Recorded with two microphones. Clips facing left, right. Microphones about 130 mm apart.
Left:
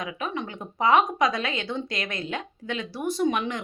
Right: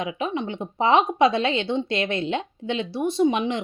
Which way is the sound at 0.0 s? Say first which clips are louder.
Right 4 dB; 25° right (ahead or behind).